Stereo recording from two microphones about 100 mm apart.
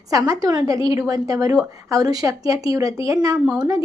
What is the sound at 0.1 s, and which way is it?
A woman's voice, 35° right (ahead or behind).